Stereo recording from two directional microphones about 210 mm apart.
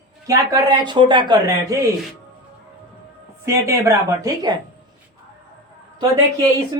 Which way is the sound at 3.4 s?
15° right (ahead or behind).